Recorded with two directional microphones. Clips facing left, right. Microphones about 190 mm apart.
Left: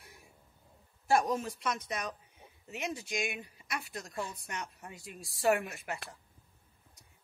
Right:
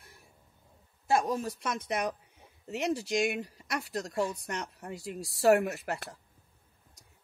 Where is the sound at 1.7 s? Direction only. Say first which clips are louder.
Right 4 dB; 55° right (ahead or behind).